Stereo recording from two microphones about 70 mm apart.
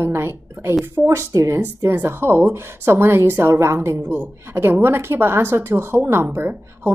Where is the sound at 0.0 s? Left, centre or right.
Right.